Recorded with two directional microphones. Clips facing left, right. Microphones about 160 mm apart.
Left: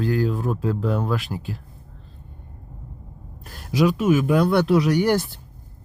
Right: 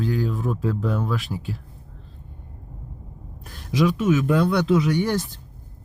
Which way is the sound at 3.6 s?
5° left (ahead or behind).